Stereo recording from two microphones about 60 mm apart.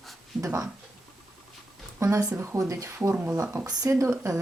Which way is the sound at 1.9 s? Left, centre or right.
Right.